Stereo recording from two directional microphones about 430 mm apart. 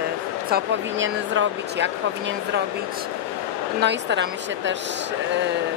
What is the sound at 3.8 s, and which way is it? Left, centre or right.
Speech, right.